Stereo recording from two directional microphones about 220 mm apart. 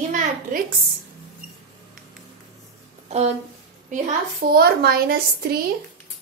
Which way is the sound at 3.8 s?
35° right (ahead or behind).